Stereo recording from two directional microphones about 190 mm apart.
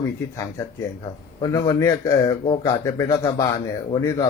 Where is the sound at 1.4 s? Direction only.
20° left (ahead or behind).